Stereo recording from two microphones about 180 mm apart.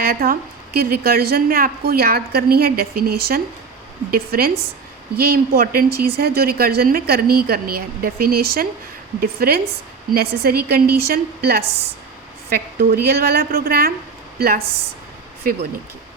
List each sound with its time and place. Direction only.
0.0 s a woman's voice: 55° right (ahead or behind)